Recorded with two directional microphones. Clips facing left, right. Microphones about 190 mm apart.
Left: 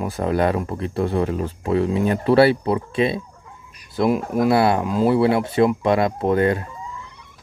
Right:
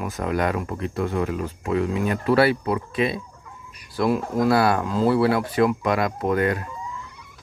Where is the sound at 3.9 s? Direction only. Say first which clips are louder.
Left 2 dB; 20° left (ahead or behind).